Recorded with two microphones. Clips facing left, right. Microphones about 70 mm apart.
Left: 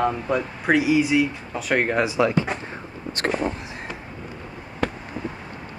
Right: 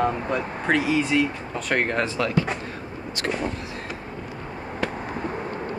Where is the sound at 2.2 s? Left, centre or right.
Left.